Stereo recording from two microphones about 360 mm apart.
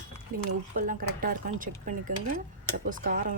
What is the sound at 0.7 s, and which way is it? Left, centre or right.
Speech, right.